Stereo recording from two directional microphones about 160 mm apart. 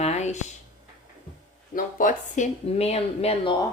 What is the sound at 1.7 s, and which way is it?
Speech, 55° left (ahead or behind).